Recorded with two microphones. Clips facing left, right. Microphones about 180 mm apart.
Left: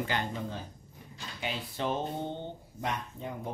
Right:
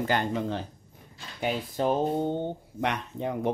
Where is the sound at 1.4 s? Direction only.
40° right (ahead or behind).